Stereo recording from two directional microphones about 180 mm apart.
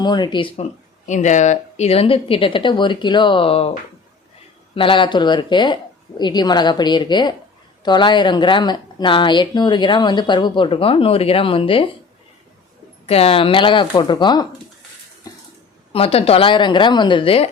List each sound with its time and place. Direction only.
0.0 s speech: 25° left (ahead or behind)
4.7 s speech: 30° left (ahead or behind)
13.1 s speech: 35° left (ahead or behind)
15.9 s speech: 30° left (ahead or behind)